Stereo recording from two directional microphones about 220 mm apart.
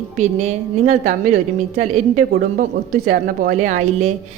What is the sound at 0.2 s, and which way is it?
A woman's voice, 30° right (ahead or behind).